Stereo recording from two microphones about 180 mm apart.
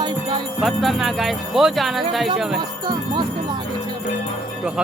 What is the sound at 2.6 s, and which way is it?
Speech, 25° right (ahead or behind).